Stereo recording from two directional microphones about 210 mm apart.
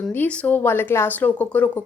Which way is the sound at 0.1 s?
10° left (ahead or behind).